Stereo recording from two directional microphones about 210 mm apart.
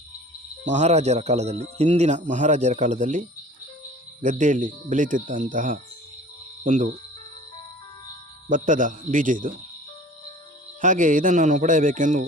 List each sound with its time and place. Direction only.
0.7 s speech: 35° right (ahead or behind)
8.4 s speech: 40° right (ahead or behind)
10.8 s speech: 40° right (ahead or behind)